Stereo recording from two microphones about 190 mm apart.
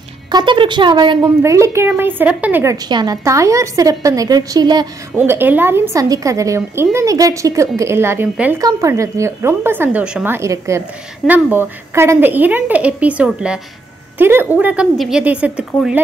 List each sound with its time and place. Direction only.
0.3 s a woman's voice: 25° right (ahead or behind); by 16.0 s 5° right (ahead or behind)